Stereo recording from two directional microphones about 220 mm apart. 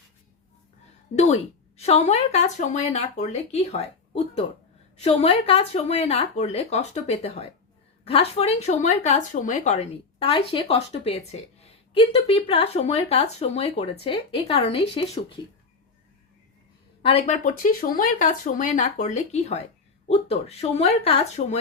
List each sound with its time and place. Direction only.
1.1 s speech: 30° left (ahead or behind)
17.0 s speech: 25° left (ahead or behind)